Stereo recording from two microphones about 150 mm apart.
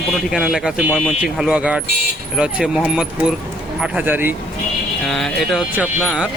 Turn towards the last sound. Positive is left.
turn(degrees=-10)  # may be behind; listen again after turning